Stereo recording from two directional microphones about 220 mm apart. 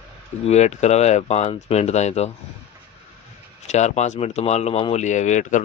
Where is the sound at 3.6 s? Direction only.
30° left (ahead or behind).